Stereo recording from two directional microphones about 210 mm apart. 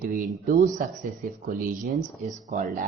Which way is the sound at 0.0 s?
40° right (ahead or behind).